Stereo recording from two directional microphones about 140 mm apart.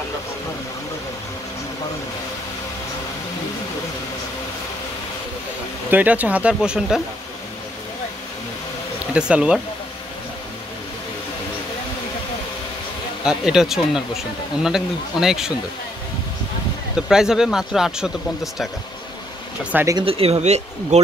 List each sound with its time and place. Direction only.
5.9 s speech: 10° right (ahead or behind)
9.0 s speech: 10° right (ahead or behind)
13.2 s speech: 5° right (ahead or behind)
17.1 s speech: 5° right (ahead or behind)
20.1 s speech: 45° right (ahead or behind)